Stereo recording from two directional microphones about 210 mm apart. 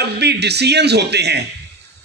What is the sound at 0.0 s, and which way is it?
A man's voice, 50° right (ahead or behind).